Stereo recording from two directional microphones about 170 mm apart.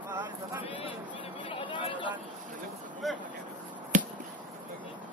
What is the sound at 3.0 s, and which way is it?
Speech, centre (ahead or behind).